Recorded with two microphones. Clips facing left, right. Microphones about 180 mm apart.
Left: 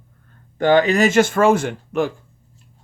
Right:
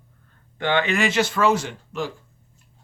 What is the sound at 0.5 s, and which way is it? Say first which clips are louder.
Speech: left 7 dB; 40° left (ahead or behind).